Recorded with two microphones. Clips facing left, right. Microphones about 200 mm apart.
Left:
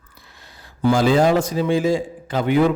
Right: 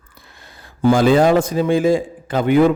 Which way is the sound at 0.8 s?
50° right (ahead or behind).